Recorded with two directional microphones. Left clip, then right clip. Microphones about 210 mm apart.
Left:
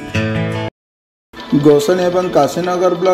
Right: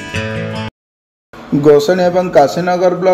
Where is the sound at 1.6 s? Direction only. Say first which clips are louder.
Right 2 dB; 25° left (ahead or behind).